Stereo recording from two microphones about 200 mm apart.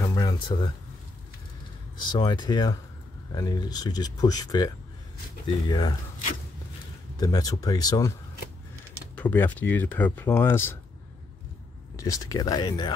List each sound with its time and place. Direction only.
0.0 s a sound: 20° left (ahead or behind)
2.0 s speech: 20° left (ahead or behind)
7.2 s speech: 20° left (ahead or behind)
9.1 s speech: 10° left (ahead or behind)
12.0 s speech: 15° left (ahead or behind)